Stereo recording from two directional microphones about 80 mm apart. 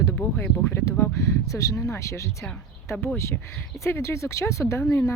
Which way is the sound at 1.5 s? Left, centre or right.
Left.